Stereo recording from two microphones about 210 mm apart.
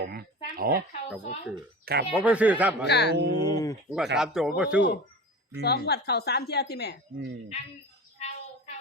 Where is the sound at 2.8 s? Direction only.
55° left (ahead or behind).